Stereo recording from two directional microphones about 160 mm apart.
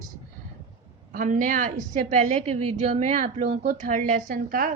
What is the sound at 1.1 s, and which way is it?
A woman's voice, 55° right (ahead or behind).